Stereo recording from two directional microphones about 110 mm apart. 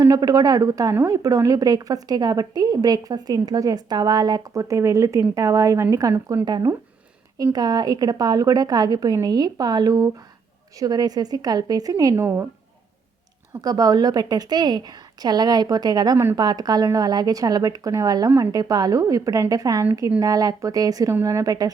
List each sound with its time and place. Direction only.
0.0 s a woman's voice: 35° right (ahead or behind)
13.6 s a woman's voice: 35° right (ahead or behind)